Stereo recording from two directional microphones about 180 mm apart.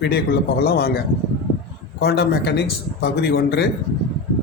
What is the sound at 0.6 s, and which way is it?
Speech, 60° left (ahead or behind).